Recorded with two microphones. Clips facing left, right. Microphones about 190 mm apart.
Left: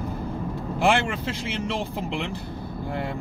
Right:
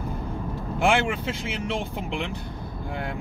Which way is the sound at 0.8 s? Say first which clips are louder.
Even; centre (ahead or behind).